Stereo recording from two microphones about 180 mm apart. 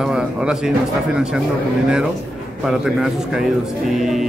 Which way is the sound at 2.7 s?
Centre (ahead or behind).